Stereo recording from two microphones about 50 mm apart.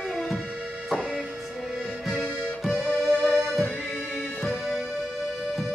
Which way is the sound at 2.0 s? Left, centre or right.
Centre.